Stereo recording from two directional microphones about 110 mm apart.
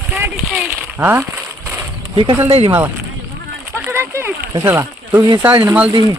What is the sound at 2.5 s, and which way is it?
Speech, 60° right (ahead or behind).